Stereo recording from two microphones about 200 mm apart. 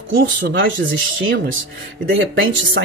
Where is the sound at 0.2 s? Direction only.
70° right (ahead or behind).